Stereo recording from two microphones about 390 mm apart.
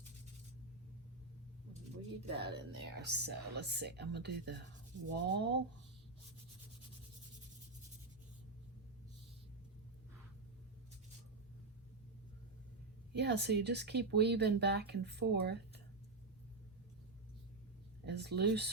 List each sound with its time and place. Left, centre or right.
2.3 s speech: right
13.1 s speech: right
18.0 s speech: right